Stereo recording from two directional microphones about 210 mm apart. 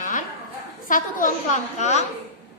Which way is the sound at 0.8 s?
40° left (ahead or behind).